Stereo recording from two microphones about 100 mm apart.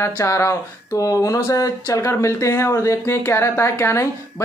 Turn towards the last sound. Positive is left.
turn(degrees=25)  # may be behind; listen again after turning